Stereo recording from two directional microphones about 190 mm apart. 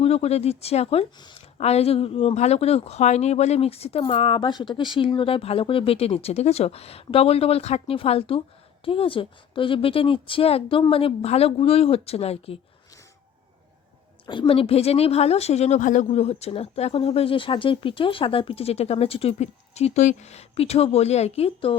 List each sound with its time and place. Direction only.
0.0 s a woman's voice: 35° left (ahead or behind)
14.3 s a woman's voice: 25° left (ahead or behind)